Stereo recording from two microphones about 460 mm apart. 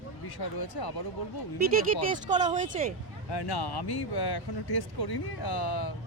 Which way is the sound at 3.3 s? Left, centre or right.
Left.